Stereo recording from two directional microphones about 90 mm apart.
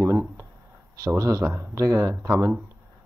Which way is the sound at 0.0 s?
30° right (ahead or behind).